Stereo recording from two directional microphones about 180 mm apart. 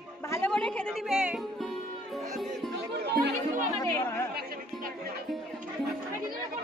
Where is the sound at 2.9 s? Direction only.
60° right (ahead or behind).